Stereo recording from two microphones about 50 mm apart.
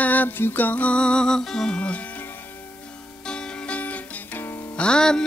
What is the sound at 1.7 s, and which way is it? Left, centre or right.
Speech, left.